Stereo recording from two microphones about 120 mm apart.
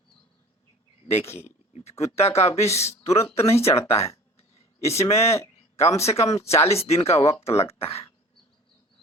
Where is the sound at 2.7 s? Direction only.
60° left (ahead or behind).